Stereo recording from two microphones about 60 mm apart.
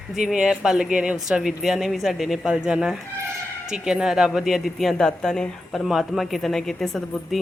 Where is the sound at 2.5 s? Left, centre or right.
Centre.